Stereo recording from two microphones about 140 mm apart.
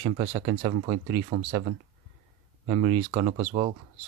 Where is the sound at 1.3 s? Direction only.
50° right (ahead or behind).